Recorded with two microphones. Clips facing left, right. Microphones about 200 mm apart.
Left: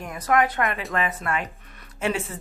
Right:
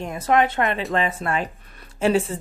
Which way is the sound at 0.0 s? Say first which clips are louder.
Right 2 dB; 25° right (ahead or behind).